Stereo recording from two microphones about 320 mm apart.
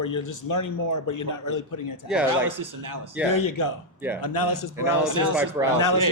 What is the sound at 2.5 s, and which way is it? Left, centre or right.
Speech, right.